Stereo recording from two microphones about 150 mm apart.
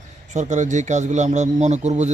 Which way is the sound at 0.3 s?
55° right (ahead or behind).